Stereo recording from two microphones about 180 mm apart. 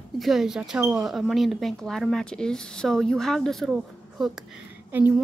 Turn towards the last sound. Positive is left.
turn(degrees=-10)  # may be behind; listen again after turning